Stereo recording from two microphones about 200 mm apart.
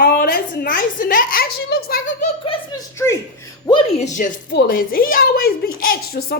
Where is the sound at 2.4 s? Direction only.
25° left (ahead or behind).